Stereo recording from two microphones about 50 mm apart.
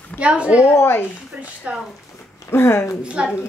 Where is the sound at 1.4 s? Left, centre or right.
Right.